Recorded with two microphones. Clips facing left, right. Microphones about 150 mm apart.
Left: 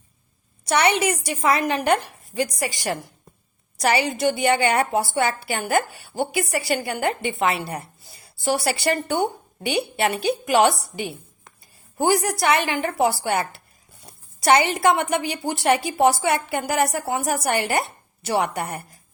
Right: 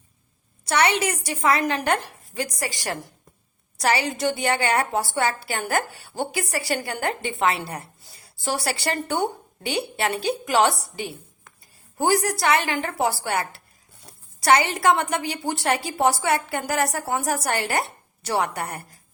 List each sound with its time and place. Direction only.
0.7 s a woman's voice: 20° left (ahead or behind)
11.9 s a woman's voice: 15° left (ahead or behind)